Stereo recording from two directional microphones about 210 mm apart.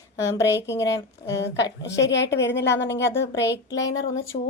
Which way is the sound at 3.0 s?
10° left (ahead or behind).